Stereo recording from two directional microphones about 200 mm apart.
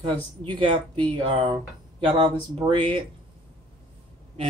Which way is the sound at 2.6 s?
20° right (ahead or behind).